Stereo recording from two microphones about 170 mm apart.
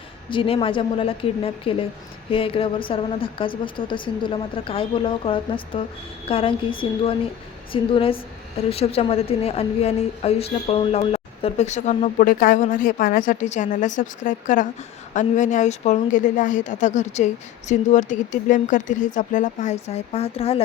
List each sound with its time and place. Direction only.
0.3 s a woman's voice: 30° left (ahead or behind)